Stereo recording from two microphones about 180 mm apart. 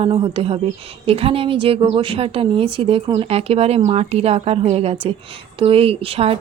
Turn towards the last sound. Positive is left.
turn(degrees=-30)  # may be behind; listen again after turning